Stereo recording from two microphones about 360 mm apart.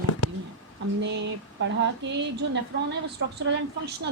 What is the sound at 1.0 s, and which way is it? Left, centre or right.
Speech, right.